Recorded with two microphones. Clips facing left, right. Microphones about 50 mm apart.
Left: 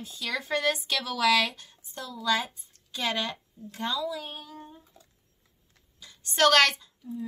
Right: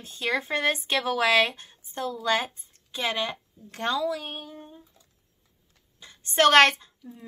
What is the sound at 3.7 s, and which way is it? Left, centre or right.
Speech, right.